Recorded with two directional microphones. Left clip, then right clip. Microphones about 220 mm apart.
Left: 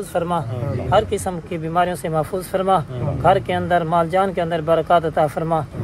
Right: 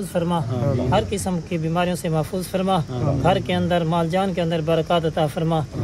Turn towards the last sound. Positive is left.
turn(degrees=15)  # may be behind; listen again after turning